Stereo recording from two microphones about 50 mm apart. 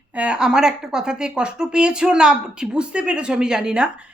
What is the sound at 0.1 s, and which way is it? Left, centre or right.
Speech, right.